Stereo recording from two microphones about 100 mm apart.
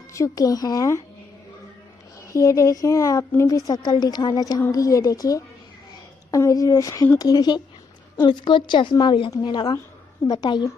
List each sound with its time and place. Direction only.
0.1 s a woman's voice: 35° left (ahead or behind)
2.3 s a woman's voice: 30° left (ahead or behind)